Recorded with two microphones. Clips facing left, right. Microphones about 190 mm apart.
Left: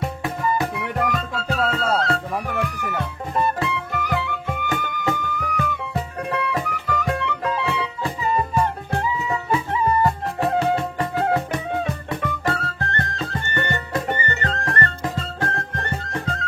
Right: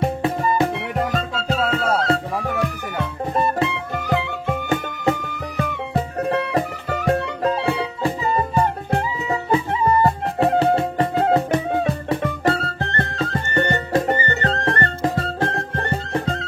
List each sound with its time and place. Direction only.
0.0 s music: 25° right (ahead or behind)